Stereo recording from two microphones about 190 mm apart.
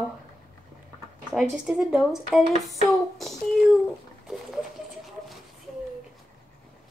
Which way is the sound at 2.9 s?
Centre (ahead or behind).